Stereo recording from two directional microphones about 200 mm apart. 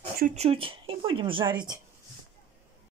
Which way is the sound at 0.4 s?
30° right (ahead or behind).